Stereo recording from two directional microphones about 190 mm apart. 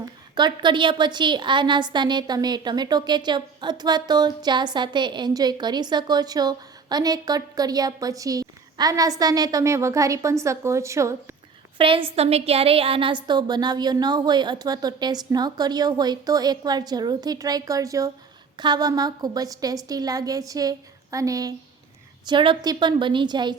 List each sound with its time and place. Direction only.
0.3 s a woman's voice: 25° right (ahead or behind)
11.8 s a woman's voice: 30° right (ahead or behind)